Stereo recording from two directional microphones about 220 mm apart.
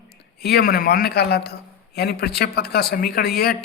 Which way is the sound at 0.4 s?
45° left (ahead or behind).